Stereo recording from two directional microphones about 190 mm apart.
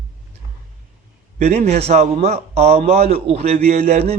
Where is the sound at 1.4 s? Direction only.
35° right (ahead or behind).